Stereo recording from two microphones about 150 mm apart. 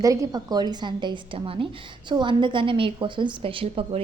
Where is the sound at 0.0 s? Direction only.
25° right (ahead or behind).